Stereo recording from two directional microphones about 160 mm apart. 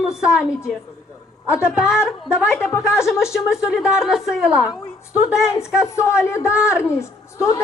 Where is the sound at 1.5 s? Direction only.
15° left (ahead or behind).